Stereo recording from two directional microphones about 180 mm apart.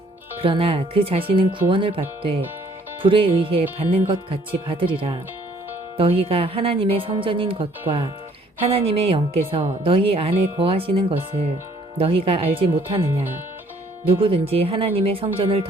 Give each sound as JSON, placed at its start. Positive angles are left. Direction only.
{"t": 0.4, "sound": "a woman's voice", "side_deg": -30}
{"t": 3.0, "sound": "a woman's voice", "side_deg": -30}
{"t": 14.2, "sound": "a woman's voice", "side_deg": -30}